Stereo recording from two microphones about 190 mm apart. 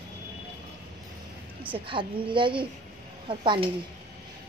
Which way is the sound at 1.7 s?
25° right (ahead or behind).